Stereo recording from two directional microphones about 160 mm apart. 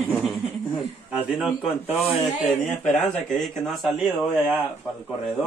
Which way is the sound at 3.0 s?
Centre (ahead or behind).